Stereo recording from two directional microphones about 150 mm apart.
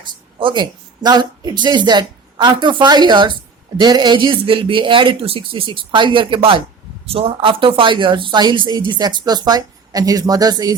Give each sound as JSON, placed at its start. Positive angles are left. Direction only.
{"t": 0.0, "sound": "speech", "side_deg": -30}